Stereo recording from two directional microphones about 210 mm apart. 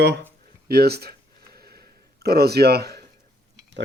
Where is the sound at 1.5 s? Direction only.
45° right (ahead or behind).